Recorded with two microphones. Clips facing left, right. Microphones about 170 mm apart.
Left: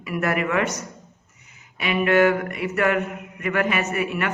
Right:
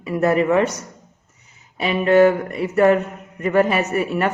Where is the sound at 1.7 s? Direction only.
30° right (ahead or behind).